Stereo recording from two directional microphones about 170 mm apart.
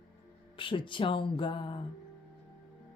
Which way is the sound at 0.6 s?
30° left (ahead or behind).